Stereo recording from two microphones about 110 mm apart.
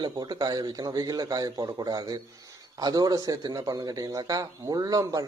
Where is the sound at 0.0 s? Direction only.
40° right (ahead or behind).